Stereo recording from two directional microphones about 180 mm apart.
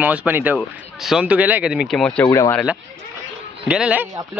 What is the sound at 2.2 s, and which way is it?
Speech, 15° left (ahead or behind).